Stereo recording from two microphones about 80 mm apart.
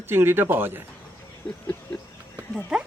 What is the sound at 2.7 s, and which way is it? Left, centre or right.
Speech, centre.